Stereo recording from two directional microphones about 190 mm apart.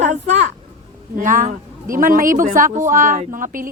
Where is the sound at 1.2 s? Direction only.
45° right (ahead or behind).